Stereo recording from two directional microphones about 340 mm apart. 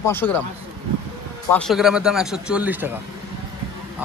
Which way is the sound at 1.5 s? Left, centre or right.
Centre.